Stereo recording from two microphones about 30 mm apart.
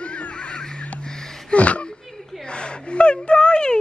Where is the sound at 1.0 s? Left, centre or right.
Centre.